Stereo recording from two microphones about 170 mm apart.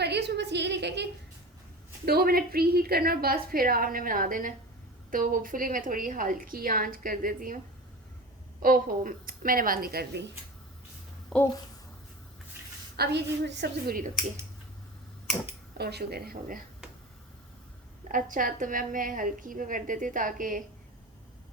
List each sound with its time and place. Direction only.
0.0 s a sound: 80° right
2.0 s a woman's voice: 65° right (ahead or behind)
8.6 s a woman's voice: 55° right (ahead or behind); by 10.3 s 80° right
11.3 s speech: centre (ahead or behind)
13.0 s a woman's voice: 80° right; by 14.1 s 60° right (ahead or behind)
15.8 s a woman's voice: 70° right (ahead or behind)
18.1 s a woman's voice: 55° right (ahead or behind)